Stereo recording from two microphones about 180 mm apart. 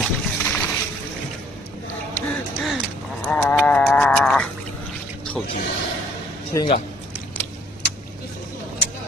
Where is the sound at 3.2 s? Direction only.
5° left (ahead or behind).